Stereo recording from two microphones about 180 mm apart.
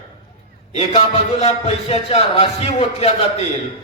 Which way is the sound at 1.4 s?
35° left (ahead or behind).